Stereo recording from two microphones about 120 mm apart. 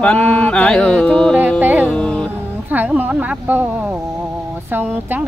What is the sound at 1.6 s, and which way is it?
Speech, 15° right (ahead or behind).